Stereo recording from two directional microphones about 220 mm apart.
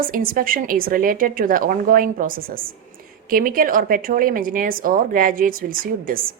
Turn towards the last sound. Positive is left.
turn(degrees=-40)  # may be behind; listen again after turning